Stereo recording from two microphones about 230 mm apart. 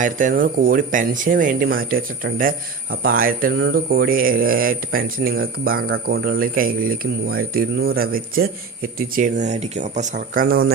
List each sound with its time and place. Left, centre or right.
0.0 s speech: right